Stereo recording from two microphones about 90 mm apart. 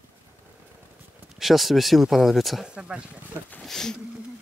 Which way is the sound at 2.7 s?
10° right (ahead or behind).